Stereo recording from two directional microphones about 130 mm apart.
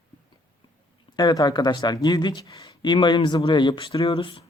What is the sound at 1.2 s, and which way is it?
Speech, 30° left (ahead or behind).